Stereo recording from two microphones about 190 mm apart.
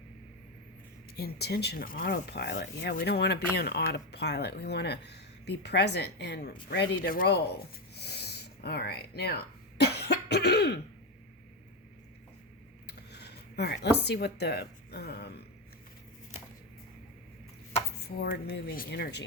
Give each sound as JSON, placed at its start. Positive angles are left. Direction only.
{"t": 1.1, "sound": "speech", "side_deg": 55}
{"t": 7.0, "sound": "speech", "side_deg": 50}
{"t": 12.9, "sound": "a sound", "side_deg": 60}
{"t": 14.0, "sound": "speech", "side_deg": 60}
{"t": 18.0, "sound": "speech", "side_deg": 55}